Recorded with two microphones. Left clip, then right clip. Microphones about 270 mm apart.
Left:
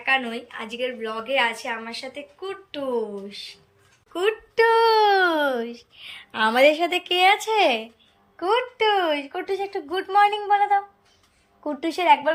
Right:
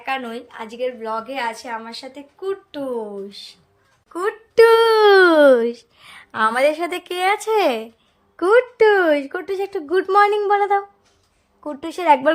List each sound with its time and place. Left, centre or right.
0.0 s a woman's voice: centre
4.1 s speech: centre
4.5 s a woman's voice: right